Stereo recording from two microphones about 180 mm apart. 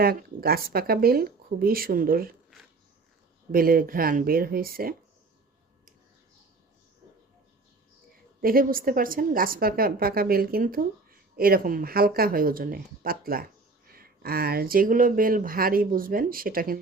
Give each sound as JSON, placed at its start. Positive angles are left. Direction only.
{"t": 0.0, "sound": "speech", "side_deg": -55}
{"t": 3.5, "sound": "a woman's voice", "side_deg": -55}
{"t": 8.4, "sound": "a woman's voice", "side_deg": -55}